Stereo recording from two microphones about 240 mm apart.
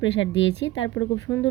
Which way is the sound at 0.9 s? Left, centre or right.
Centre.